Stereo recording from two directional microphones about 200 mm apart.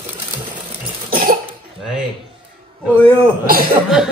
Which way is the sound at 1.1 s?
45° right (ahead or behind).